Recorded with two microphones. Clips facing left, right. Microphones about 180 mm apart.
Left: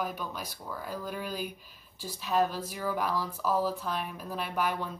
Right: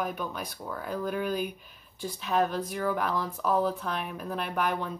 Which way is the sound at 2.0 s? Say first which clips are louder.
Right 1 dB; centre (ahead or behind).